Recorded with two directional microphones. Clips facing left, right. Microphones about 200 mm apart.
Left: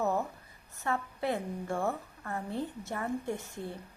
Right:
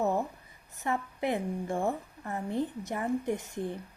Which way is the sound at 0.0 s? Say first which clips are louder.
Right 2 dB; 15° right (ahead or behind).